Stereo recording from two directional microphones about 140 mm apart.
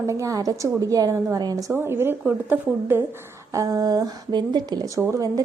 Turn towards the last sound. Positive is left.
turn(degrees=-25)  # may be behind; listen again after turning